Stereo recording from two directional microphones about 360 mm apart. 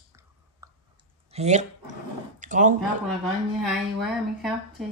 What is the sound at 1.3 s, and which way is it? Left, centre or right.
Speech, centre.